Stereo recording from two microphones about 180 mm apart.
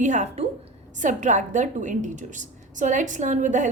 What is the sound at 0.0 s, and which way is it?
A woman's voice, 45° right (ahead or behind).